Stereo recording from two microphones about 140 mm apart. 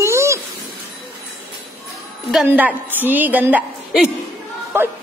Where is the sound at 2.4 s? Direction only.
15° right (ahead or behind).